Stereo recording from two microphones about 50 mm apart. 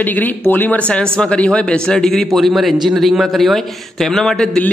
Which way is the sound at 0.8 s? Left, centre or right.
Left.